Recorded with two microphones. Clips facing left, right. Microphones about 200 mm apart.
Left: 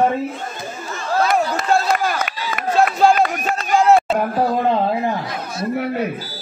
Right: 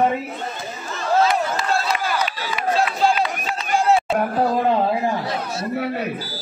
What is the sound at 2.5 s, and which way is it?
Run, 50° left (ahead or behind).